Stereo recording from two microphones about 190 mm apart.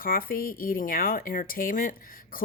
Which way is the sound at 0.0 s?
50° left (ahead or behind).